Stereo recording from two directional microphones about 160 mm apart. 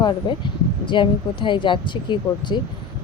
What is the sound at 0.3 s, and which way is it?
Speech, 30° left (ahead or behind).